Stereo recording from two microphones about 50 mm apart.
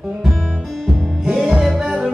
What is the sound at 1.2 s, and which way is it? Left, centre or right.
Music, centre.